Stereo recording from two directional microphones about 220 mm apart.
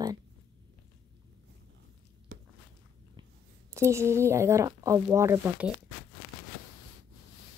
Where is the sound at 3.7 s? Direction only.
10° right (ahead or behind).